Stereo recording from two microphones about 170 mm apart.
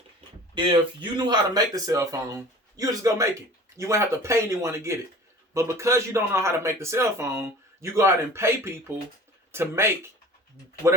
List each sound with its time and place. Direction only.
0.5 s speech: 30° right (ahead or behind)